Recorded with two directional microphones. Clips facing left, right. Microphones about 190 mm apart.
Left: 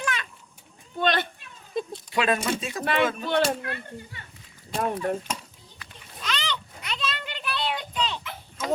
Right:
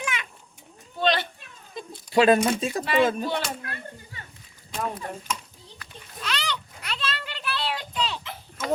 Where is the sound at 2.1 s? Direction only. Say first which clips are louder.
Right 7 dB; 35° right (ahead or behind).